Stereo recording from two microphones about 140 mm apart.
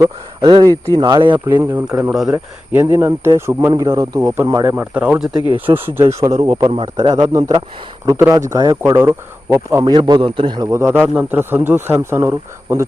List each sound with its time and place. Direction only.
0.4 s a man's voice: 35° right (ahead or behind)
1.5 s speech: 15° right (ahead or behind)
4.7 s speech: 10° right (ahead or behind)
5.9 s a man's voice: 20° right (ahead or behind)
8.0 s speech: 20° right (ahead or behind)
9.8 s a man's voice: 30° right (ahead or behind)